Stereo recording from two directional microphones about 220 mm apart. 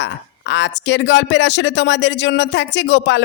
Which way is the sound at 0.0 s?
55° left (ahead or behind).